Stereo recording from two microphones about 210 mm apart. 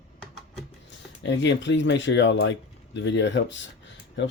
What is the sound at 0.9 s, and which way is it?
Speech, 60° left (ahead or behind).